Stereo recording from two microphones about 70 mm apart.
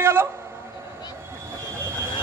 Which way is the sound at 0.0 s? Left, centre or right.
Right.